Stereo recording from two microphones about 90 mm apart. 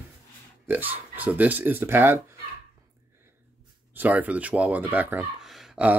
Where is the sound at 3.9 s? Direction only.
20° right (ahead or behind).